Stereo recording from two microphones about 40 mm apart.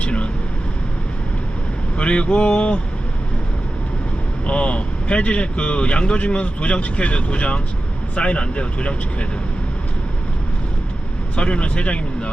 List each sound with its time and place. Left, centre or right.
0.0 s vehicle: left
2.0 s speech: left
4.4 s speech: left
11.3 s speech: left